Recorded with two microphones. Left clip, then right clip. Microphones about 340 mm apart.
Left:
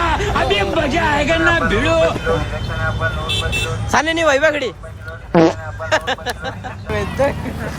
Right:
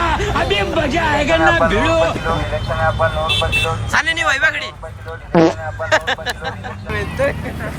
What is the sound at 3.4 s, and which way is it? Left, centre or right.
Speech, left.